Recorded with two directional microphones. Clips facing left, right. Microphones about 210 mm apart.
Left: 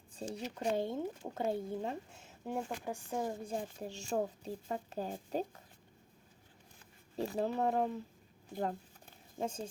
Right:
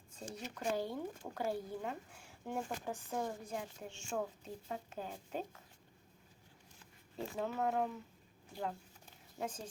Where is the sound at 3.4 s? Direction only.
30° left (ahead or behind).